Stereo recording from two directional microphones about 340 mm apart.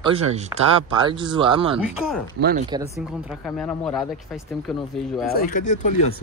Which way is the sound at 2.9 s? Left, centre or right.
Centre.